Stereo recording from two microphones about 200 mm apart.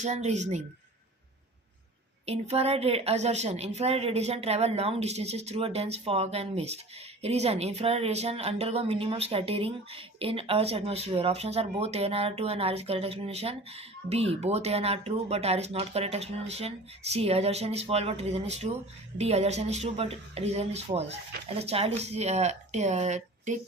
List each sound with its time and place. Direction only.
0.0 s speech: 35° right (ahead or behind)
2.2 s speech: 30° right (ahead or behind)